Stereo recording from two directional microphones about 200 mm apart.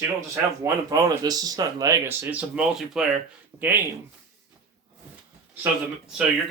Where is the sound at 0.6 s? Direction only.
20° right (ahead or behind).